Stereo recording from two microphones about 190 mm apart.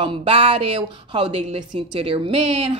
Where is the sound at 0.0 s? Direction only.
30° right (ahead or behind).